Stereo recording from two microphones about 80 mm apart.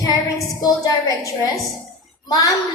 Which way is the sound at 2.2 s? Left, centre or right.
Left.